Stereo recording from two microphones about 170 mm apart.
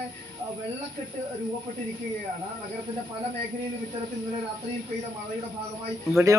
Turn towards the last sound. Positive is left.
turn(degrees=-20)  # may be behind; listen again after turning